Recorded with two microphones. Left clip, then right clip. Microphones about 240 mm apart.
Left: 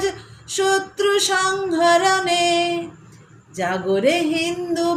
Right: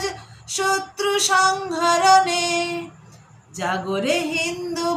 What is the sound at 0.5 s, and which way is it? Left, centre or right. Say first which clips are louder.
Female singing: left 3 dB; centre.